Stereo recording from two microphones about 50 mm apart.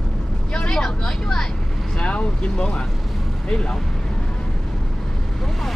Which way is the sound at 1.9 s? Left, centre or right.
Left.